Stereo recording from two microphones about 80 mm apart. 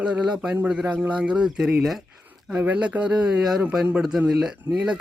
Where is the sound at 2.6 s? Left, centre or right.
Centre.